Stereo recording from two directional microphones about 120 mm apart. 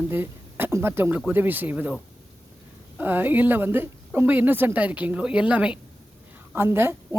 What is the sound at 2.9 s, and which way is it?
A woman's voice, 15° right (ahead or behind).